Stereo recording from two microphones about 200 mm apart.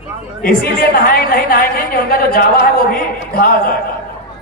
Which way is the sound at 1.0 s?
45° left (ahead or behind).